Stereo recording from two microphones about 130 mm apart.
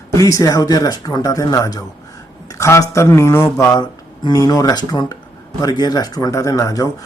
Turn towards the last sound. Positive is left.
turn(degrees=25)  # may be behind; listen again after turning